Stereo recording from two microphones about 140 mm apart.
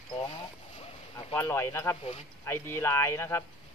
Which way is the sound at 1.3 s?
20° left (ahead or behind).